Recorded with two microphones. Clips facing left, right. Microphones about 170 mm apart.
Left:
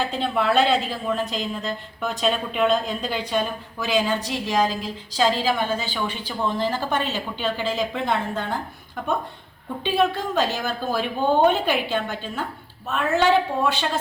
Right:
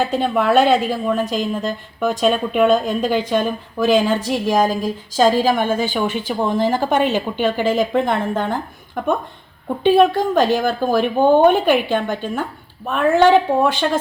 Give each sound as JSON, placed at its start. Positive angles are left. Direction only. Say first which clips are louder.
{"t": 0.0, "sound": "a woman's voice", "louder": "right 5 dB", "side_deg": -45}